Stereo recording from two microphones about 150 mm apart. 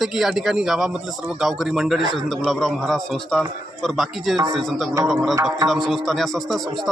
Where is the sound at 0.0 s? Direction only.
Centre (ahead or behind).